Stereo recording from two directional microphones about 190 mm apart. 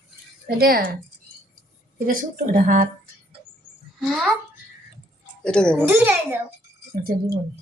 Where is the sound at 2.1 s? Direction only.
45° right (ahead or behind).